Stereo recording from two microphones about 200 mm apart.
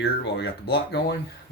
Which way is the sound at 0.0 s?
55° left (ahead or behind).